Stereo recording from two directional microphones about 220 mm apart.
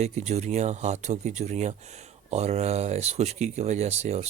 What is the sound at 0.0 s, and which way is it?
Speech, 30° right (ahead or behind).